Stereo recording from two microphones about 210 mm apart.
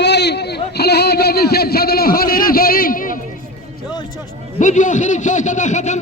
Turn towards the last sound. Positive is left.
turn(degrees=35)  # may be behind; listen again after turning